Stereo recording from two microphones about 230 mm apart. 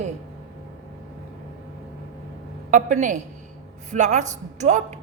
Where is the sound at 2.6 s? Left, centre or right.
Right.